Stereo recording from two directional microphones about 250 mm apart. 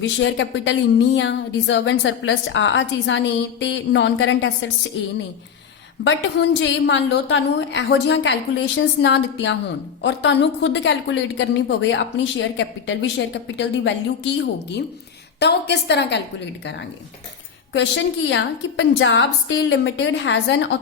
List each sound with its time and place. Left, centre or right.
0.0 s a woman's voice: left
6.1 s a woman's voice: left
17.7 s a woman's voice: left